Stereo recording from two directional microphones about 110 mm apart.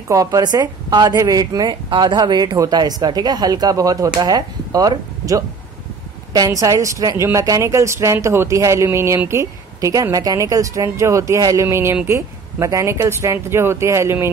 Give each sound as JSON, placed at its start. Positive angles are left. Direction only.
{"t": 0.1, "sound": "a woman's voice", "side_deg": -30}